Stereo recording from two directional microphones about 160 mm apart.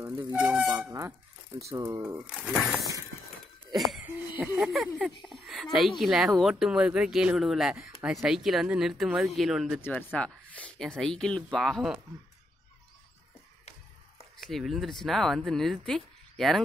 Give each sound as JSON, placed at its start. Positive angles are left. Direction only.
{"t": 0.4, "sound": "speech", "side_deg": -5}
{"t": 2.2, "sound": "speech", "side_deg": -5}
{"t": 3.7, "sound": "a sound", "side_deg": 0}
{"t": 4.0, "sound": "speech", "side_deg": -5}
{"t": 9.8, "sound": "speech", "side_deg": 10}
{"t": 14.4, "sound": "speech", "side_deg": 0}